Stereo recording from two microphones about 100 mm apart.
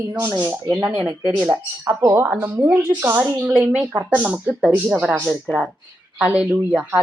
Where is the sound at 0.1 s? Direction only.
25° right (ahead or behind).